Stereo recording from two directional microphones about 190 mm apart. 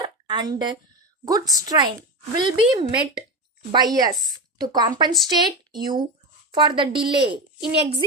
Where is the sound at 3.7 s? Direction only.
20° right (ahead or behind).